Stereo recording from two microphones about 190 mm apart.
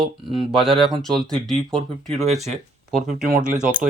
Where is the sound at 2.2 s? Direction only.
35° right (ahead or behind).